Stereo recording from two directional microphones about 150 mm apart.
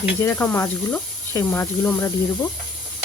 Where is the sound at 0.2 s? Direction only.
15° left (ahead or behind).